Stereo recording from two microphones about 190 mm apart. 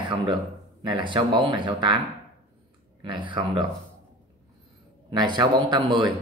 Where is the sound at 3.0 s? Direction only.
25° right (ahead or behind).